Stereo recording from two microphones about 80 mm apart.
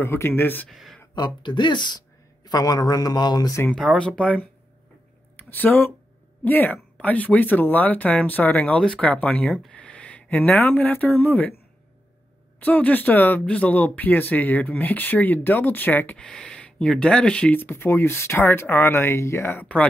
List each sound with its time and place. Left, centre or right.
0.0 s speech: left
0.7 s speech: centre
1.1 s speech: left
3.7 s speech: centre; by 11.5 s left
12.5 s speech: left
16.2 s speech: centre
17.6 s speech: left
19.6 s speech: centre